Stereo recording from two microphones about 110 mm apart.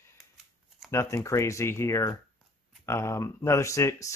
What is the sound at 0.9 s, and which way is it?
Speech, 25° left (ahead or behind).